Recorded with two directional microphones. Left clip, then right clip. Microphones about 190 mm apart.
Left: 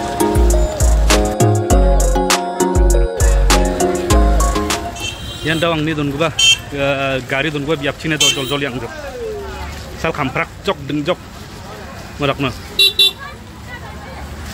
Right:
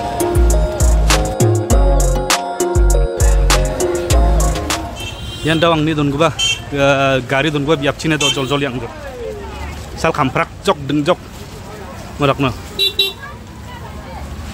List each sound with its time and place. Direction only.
0.2 s music: centre (ahead or behind)
5.4 s speech: 20° right (ahead or behind)
6.3 s a sound: 50° left (ahead or behind)
6.7 s speech: 25° right (ahead or behind)
10.0 s speech: 15° right (ahead or behind)
12.2 s speech: 20° right (ahead or behind)